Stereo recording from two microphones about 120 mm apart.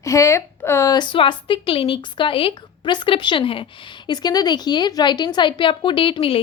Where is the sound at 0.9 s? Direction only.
45° left (ahead or behind).